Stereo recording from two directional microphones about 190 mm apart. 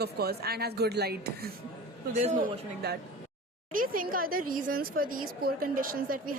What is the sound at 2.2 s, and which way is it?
Speech, 40° right (ahead or behind).